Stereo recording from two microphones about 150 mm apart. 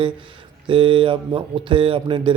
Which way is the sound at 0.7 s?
35° right (ahead or behind).